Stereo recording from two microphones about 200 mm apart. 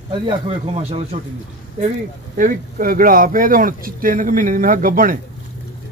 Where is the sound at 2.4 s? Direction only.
40° right (ahead or behind).